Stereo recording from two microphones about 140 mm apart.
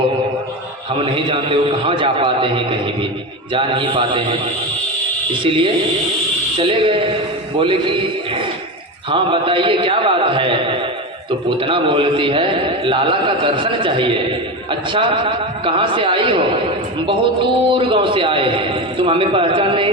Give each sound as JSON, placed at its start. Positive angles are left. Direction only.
{"t": 0.9, "sound": "a man's voice", "side_deg": -40}
{"t": 17.7, "sound": "a man's voice", "side_deg": -40}